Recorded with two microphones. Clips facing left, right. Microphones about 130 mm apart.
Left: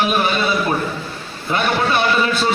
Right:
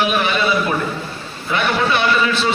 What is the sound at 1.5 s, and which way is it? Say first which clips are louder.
Speech: even; 40° left (ahead or behind).